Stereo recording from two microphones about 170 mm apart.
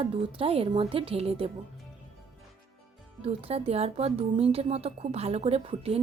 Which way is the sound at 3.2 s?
35° right (ahead or behind).